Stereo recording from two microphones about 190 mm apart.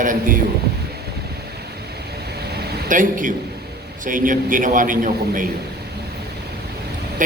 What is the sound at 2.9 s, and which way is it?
A man's voice, 45° right (ahead or behind).